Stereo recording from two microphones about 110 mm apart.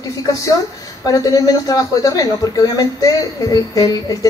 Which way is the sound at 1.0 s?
30° left (ahead or behind).